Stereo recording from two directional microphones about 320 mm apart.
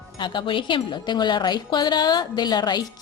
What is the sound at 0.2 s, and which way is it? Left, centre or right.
Speech, centre.